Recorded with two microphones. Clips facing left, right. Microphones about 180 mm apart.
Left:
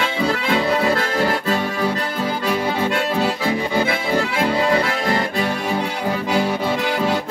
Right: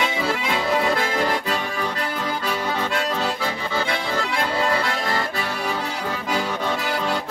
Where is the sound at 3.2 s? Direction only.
15° left (ahead or behind).